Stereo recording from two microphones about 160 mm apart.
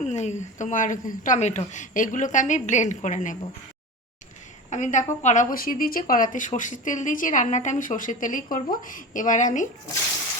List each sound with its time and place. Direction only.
0.0 s a woman's voice: 45° left (ahead or behind)
4.7 s a woman's voice: 50° left (ahead or behind)